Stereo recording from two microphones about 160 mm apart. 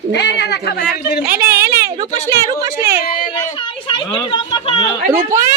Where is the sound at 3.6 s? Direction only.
30° left (ahead or behind).